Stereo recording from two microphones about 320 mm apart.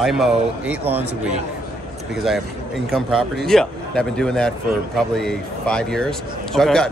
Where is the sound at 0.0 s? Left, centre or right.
Centre.